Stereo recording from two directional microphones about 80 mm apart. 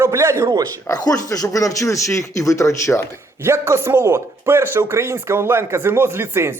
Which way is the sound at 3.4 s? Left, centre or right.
Right.